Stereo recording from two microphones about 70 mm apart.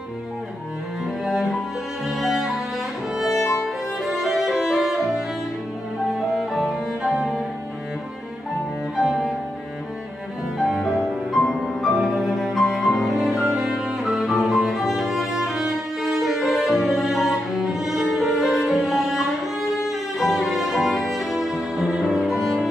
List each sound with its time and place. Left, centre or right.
1.0 s cello: centre
2.0 s music: centre
3.3 s violin: left
3.6 s music: centre
8.9 s music: centre
10.6 s music: centre